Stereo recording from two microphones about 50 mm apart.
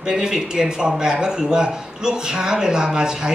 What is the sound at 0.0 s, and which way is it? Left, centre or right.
Speech, centre.